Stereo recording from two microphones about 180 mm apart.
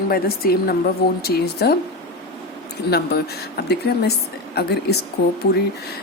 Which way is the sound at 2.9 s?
60° left (ahead or behind).